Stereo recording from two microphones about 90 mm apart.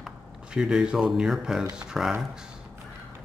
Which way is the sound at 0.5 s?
10° right (ahead or behind).